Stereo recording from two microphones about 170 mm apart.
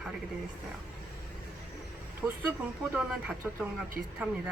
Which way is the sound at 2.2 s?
25° right (ahead or behind).